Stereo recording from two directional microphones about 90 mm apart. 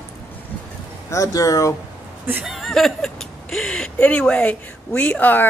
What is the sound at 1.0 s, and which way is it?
Speech, 35° left (ahead or behind).